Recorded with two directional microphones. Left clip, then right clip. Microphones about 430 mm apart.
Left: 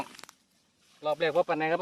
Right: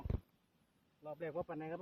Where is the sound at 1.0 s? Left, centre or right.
Centre.